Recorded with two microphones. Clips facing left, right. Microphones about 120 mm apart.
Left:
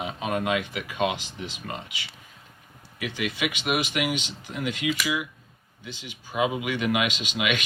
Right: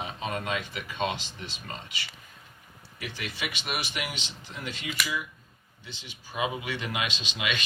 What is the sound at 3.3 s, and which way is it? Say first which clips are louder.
Speech: left 7 dB; 75° left (ahead or behind).